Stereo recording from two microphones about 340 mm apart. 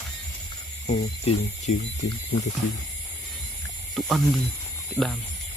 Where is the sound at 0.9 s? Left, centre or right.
Left.